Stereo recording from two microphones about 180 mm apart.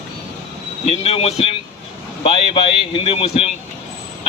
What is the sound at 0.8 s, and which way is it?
A man's voice, 35° left (ahead or behind).